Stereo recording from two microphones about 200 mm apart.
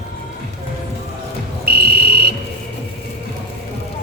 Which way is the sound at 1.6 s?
50° right (ahead or behind).